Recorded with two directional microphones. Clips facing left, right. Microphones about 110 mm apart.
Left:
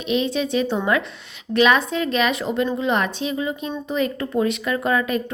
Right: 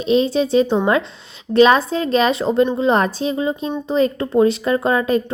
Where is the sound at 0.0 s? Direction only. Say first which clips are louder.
Right 6 dB; 35° right (ahead or behind).